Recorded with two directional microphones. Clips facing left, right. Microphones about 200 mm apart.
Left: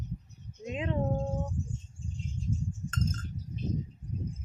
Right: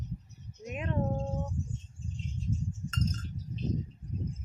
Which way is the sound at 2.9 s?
50° left (ahead or behind).